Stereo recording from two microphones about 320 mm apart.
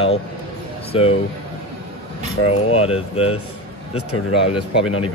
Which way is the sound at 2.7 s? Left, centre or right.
Centre.